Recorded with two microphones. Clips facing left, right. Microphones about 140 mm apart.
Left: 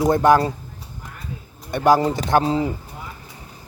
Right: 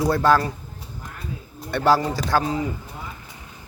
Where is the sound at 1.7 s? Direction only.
15° left (ahead or behind).